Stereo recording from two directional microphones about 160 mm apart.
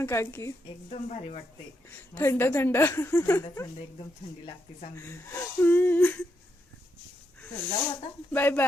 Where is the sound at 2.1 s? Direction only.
15° left (ahead or behind).